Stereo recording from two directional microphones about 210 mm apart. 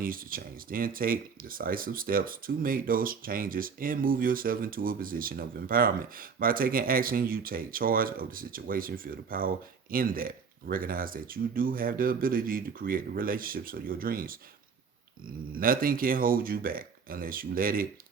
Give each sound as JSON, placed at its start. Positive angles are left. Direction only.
{"t": 0.0, "sound": "speech", "side_deg": -45}
{"t": 15.5, "sound": "speech", "side_deg": -45}